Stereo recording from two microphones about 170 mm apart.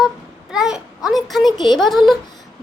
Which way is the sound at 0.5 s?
5° right (ahead or behind).